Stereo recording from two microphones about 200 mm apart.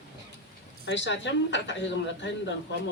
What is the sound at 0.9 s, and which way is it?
Speech, 65° left (ahead or behind).